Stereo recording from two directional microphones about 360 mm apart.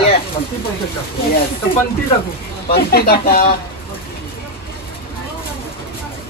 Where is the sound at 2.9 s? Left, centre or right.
Left.